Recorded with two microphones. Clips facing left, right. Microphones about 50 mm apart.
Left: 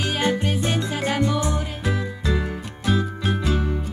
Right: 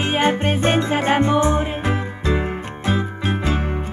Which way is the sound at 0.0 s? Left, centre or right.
Right.